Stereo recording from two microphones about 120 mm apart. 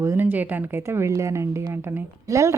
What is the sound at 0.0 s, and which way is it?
A woman's voice, 20° right (ahead or behind).